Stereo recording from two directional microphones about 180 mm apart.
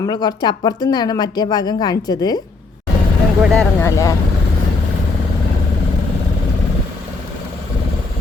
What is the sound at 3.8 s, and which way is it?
Speech, 15° left (ahead or behind).